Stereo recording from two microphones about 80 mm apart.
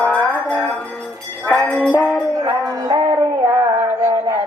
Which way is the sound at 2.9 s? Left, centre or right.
Right.